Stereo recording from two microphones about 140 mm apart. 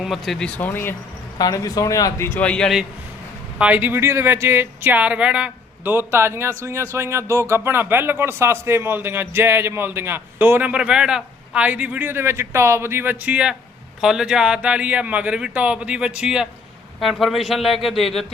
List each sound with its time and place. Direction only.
0.0 s speech: centre (ahead or behind); by 0.9 s 15° left (ahead or behind)
1.4 s speech: 25° left (ahead or behind); by 2.7 s 5° left (ahead or behind)
3.6 s a man's voice: 10° right (ahead or behind)